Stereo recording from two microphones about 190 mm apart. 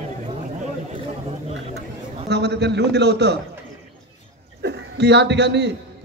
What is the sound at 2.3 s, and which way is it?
A man's voice, 60° right (ahead or behind).